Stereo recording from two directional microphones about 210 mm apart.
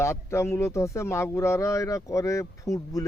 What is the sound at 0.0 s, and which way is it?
Speech, 15° left (ahead or behind).